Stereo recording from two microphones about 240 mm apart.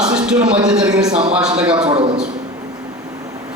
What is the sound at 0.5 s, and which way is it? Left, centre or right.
A man's voice, centre.